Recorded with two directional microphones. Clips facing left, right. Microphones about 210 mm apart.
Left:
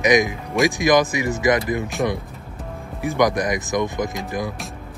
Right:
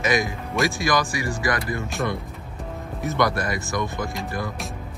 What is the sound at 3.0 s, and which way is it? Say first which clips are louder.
Speech: left 4 dB; 15° left (ahead or behind).